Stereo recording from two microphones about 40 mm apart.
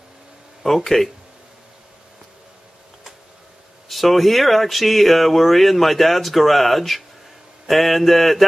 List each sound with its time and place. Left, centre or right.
0.8 s speech: centre
3.9 s speech: centre